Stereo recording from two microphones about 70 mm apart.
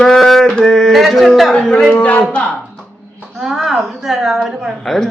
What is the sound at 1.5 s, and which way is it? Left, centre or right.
A woman's voice, centre.